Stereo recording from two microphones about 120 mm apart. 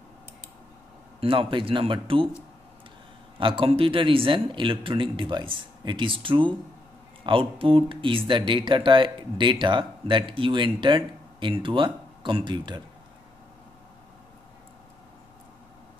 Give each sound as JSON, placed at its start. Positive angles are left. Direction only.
{"t": 1.2, "sound": "speech", "side_deg": -45}
{"t": 3.3, "sound": "speech", "side_deg": -45}